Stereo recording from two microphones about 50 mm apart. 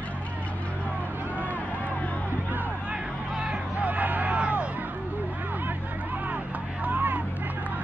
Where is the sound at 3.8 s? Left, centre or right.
Right.